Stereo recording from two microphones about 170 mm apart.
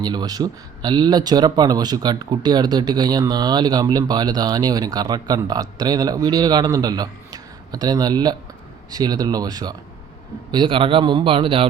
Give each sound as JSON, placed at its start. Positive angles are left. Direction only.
{"t": 0.0, "sound": "a man's voice", "side_deg": -25}